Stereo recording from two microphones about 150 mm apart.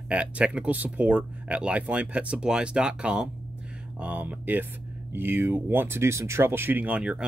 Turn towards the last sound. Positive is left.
turn(degrees=-5)  # may be behind; listen again after turning